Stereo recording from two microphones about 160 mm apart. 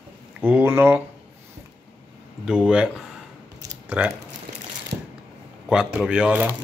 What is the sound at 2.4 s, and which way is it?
Speech, 5° right (ahead or behind).